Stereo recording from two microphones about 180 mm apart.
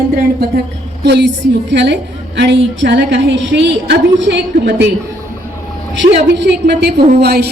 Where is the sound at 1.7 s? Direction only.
75° right (ahead or behind).